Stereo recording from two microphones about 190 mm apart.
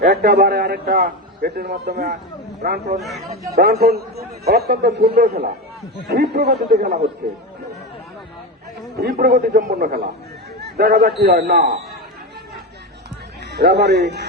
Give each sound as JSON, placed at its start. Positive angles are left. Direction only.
{"t": 0.0, "sound": "a man's voice", "side_deg": -55}
{"t": 9.0, "sound": "a man's voice", "side_deg": -55}
{"t": 10.6, "sound": "a sound", "side_deg": -60}
{"t": 11.2, "sound": "a man's voice", "side_deg": -60}
{"t": 13.5, "sound": "a man's voice", "side_deg": -60}